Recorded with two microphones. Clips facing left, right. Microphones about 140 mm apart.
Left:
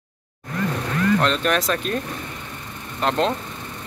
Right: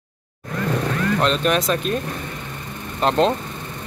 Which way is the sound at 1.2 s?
20° right (ahead or behind).